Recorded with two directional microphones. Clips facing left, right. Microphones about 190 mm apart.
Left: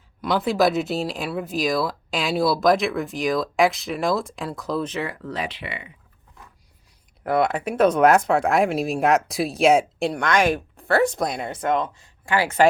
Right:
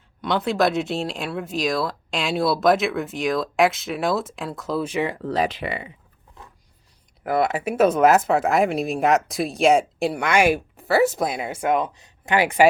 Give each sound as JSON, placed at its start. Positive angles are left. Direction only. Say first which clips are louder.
{"t": 0.2, "sound": "speech", "louder": "left 1 dB", "side_deg": 0}
{"t": 5.3, "sound": "speech", "louder": "right 6 dB", "side_deg": -40}
{"t": 7.3, "sound": "speech", "louder": "even", "side_deg": -5}